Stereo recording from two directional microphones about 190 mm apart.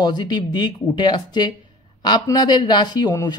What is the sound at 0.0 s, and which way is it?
A man's voice, 20° left (ahead or behind).